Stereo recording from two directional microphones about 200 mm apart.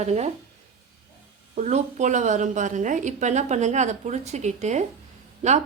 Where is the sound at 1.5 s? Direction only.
35° right (ahead or behind).